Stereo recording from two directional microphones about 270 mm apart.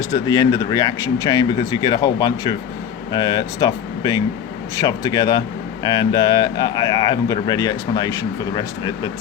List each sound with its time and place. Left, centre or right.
0.1 s speech: centre